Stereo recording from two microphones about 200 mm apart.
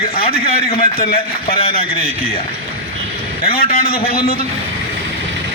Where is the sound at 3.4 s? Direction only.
45° left (ahead or behind).